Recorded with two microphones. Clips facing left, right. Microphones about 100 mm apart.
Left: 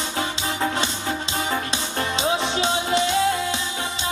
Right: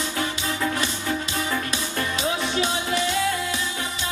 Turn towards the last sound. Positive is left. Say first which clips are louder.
# left 3 dB
turn(degrees=25)  # may be behind; listen again after turning